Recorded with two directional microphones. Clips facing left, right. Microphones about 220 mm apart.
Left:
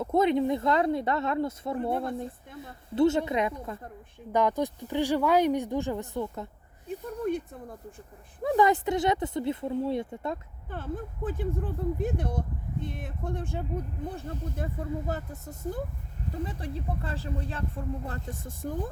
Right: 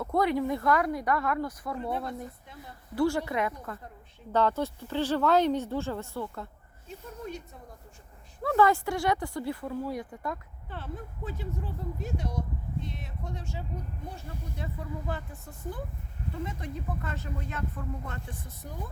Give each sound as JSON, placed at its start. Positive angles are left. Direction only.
{"t": 0.0, "sound": "speech", "side_deg": 20}
{"t": 6.8, "sound": "speech", "side_deg": 55}
{"t": 8.4, "sound": "speech", "side_deg": 15}
{"t": 10.7, "sound": "speech", "side_deg": 50}
{"t": 16.4, "sound": "speech", "side_deg": 35}